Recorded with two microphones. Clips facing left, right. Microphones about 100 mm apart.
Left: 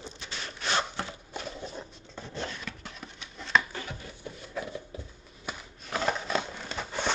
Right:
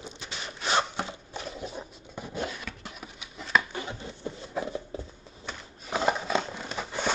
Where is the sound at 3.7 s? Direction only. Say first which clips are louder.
Right 3 dB; 20° right (ahead or behind).